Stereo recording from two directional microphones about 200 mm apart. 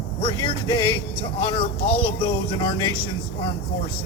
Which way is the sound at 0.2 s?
25° left (ahead or behind).